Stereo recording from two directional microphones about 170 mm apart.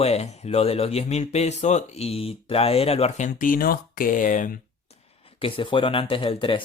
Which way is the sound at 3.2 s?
50° left (ahead or behind).